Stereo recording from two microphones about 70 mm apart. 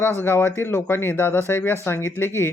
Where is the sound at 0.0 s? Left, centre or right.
Left.